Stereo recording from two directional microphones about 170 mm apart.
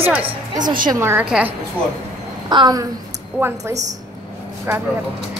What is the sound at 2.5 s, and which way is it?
Speech, 25° right (ahead or behind).